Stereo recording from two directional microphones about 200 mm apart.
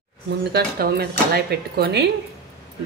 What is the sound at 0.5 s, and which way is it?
A man's voice, 50° right (ahead or behind).